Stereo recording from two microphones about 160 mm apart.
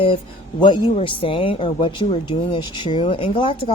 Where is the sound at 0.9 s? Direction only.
35° left (ahead or behind).